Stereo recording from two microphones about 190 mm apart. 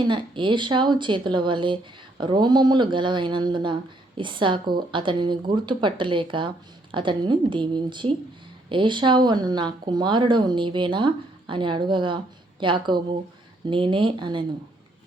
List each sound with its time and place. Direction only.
0.1 s speech: 25° right (ahead or behind)